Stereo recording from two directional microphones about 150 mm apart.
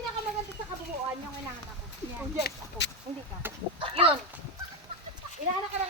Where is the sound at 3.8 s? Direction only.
35° right (ahead or behind).